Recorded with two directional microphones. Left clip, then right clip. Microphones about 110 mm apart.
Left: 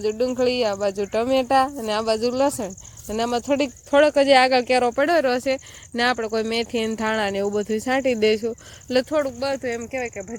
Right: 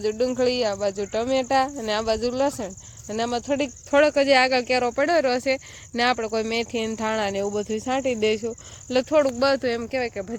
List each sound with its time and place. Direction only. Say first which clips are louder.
0.0 s speech: left 1 dB; 10° left (ahead or behind); by 1.6 s 35° left (ahead or behind)
1.9 s speech: left 2 dB; 20° left (ahead or behind)
3.3 s speech: left 4 dB; 35° left (ahead or behind)
3.9 s speech: left 2 dB; 20° left (ahead or behind); by 8.5 s 35° left (ahead or behind)
9.6 s speech: right 2 dB; 35° right (ahead or behind)
9.9 s speech: right 2 dB; 25° right (ahead or behind)